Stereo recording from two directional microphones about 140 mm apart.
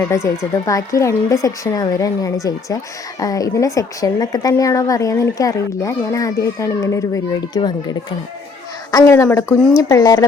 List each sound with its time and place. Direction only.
0.0 s a woman's voice: 20° left (ahead or behind)